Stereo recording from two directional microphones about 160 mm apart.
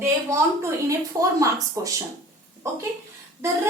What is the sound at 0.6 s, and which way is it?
A woman's voice, 20° right (ahead or behind).